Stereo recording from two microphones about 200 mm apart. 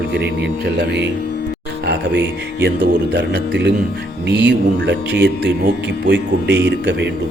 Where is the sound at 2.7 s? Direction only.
55° right (ahead or behind).